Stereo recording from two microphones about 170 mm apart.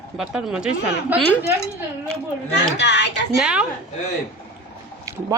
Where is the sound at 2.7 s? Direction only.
90° left.